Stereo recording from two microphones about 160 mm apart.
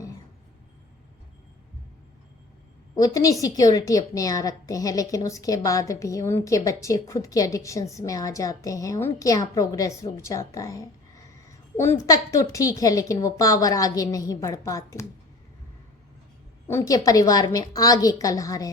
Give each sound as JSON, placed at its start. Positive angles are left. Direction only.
{"t": 2.9, "sound": "a woman's voice", "side_deg": 20}
{"t": 16.6, "sound": "a woman's voice", "side_deg": 20}